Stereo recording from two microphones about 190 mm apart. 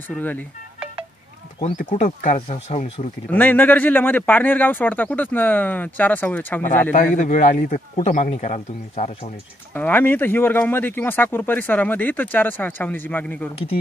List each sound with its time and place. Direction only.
0.1 s speech: 10° left (ahead or behind)
1.6 s speech: 45° left (ahead or behind)
3.3 s speech: 10° left (ahead or behind)
7.2 s speech: 40° left (ahead or behind)
9.8 s speech: 10° left (ahead or behind)